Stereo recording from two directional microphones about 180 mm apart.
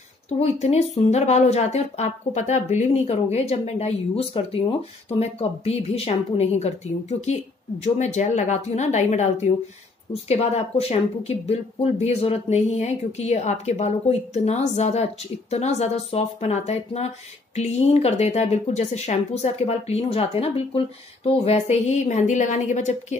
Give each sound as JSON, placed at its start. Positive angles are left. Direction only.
{"t": 0.4, "sound": "speech", "side_deg": 35}